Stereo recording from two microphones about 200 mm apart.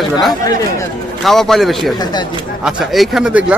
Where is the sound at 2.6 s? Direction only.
Centre (ahead or behind).